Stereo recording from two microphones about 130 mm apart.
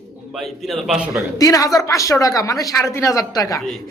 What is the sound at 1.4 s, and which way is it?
A woman's voice, 25° left (ahead or behind).